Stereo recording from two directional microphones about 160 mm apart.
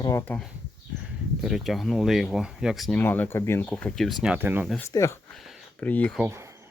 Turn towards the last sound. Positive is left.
turn(degrees=-15)  # may be behind; listen again after turning